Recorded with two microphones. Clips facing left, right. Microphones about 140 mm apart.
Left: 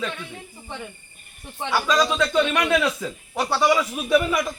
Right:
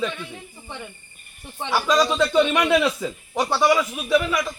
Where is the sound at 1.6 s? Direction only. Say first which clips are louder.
Right 1 dB; 10° right (ahead or behind); by 4.5 s 5° left (ahead or behind).